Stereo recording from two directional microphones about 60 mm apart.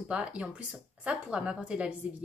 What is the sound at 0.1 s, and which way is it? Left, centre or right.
A woman's voice, right.